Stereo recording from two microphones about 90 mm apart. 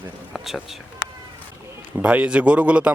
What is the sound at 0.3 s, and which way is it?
Speech, centre (ahead or behind).